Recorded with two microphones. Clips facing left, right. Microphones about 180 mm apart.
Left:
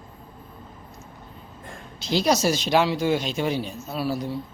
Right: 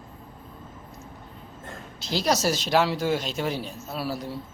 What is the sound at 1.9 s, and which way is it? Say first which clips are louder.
Speech: left 3 dB; centre (ahead or behind).